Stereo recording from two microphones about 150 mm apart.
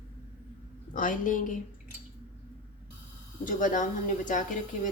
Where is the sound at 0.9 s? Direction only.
60° left (ahead or behind).